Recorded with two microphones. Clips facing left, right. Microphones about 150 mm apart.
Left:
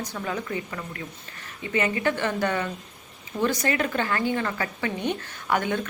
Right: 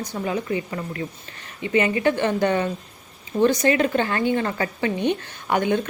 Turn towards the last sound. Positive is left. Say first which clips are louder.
# right 4 dB
turn(degrees=-25)  # may be behind; listen again after turning